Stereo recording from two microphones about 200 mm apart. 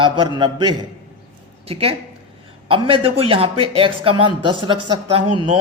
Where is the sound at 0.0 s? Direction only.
25° right (ahead or behind).